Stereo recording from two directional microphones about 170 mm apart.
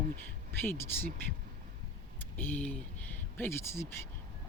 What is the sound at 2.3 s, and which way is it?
Speech, 10° left (ahead or behind).